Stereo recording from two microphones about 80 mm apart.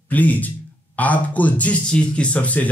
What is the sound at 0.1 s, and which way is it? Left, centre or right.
Speech, left.